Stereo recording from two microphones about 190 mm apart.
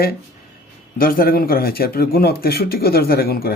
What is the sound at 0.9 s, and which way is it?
A man's voice, 50° left (ahead or behind).